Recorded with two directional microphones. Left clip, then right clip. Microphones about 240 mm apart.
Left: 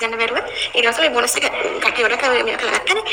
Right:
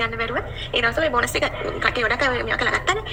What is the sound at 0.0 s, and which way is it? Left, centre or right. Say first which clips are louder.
A woman's voice: left 5 dB; left.